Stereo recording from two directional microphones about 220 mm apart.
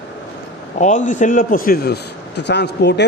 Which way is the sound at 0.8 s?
35° left (ahead or behind).